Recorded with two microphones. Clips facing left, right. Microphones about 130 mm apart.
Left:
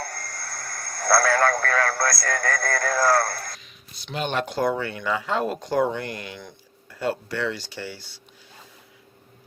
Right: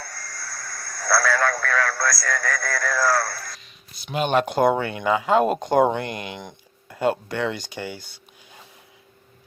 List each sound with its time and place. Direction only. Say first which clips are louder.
0.0 s speech: left 3 dB; 55° left (ahead or behind)
4.0 s speech: right 4 dB; 15° right (ahead or behind)
4.5 s speech: right 4 dB; 55° right (ahead or behind)
4.8 s speech: right 4 dB; 20° right (ahead or behind)
7.9 s speech: right 4 dB; 50° right (ahead or behind)